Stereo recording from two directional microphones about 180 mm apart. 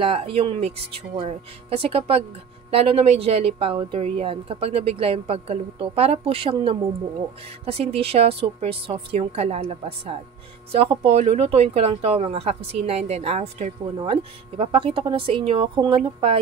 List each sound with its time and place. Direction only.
0.0 s speech: 30° right (ahead or behind)